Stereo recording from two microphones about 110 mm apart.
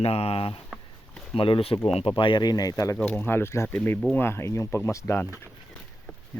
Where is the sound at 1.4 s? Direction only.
55° left (ahead or behind); by 3.0 s 30° left (ahead or behind).